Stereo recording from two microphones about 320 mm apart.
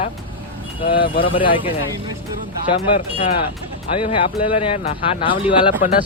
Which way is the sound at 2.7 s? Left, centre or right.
Centre.